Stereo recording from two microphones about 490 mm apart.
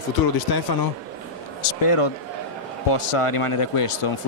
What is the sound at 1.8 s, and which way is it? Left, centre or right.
A man's voice, left.